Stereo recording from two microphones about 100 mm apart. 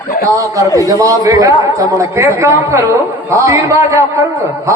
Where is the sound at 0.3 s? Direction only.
35° right (ahead or behind).